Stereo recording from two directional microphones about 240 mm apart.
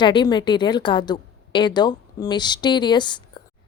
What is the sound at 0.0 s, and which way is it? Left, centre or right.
A woman's voice, centre.